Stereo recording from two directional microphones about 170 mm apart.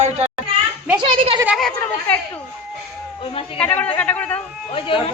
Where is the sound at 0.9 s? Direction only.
30° right (ahead or behind).